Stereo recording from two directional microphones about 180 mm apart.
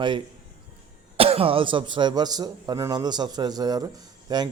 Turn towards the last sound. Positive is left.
turn(degrees=-20)  # may be behind; listen again after turning